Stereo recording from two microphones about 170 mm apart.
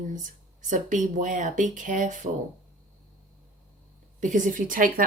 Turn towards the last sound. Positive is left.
turn(degrees=-55)  # may be behind; listen again after turning